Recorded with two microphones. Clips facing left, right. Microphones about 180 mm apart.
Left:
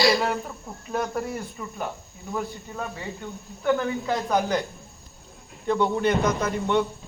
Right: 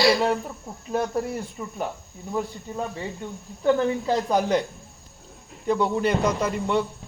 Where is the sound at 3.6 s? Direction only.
30° right (ahead or behind).